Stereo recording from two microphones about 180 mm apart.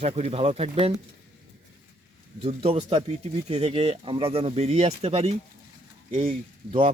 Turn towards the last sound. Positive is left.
turn(degrees=-30)  # may be behind; listen again after turning